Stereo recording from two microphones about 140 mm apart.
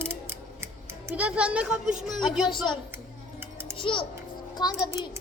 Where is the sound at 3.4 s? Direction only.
15° right (ahead or behind).